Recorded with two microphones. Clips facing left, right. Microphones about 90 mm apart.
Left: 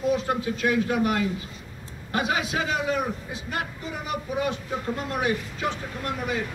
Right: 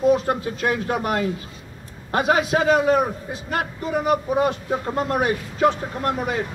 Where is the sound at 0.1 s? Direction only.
45° right (ahead or behind).